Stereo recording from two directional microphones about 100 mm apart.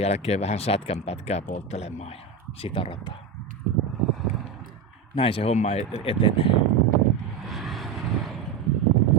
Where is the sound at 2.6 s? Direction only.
65° left (ahead or behind).